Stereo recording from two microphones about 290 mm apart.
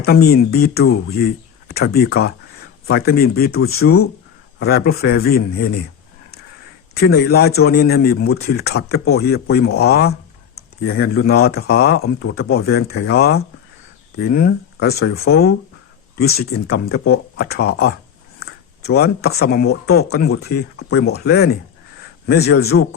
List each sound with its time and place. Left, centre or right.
0.0 s a man's voice: left
6.9 s a man's voice: left
18.4 s a sound: left
18.9 s a man's voice: left